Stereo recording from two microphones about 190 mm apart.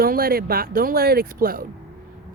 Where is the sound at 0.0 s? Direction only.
50° right (ahead or behind).